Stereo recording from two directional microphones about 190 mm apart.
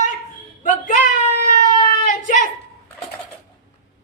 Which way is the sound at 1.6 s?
40° left (ahead or behind).